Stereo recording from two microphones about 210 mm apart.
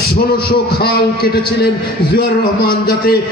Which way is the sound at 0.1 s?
45° left (ahead or behind).